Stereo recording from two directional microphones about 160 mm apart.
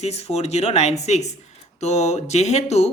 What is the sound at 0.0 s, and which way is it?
Speech, 40° left (ahead or behind).